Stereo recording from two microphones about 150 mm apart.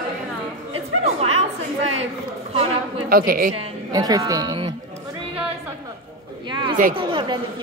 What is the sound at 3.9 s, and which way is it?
Speech, 25° right (ahead or behind).